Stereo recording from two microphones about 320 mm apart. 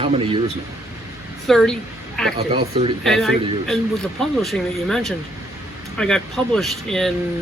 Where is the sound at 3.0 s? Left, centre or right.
Centre.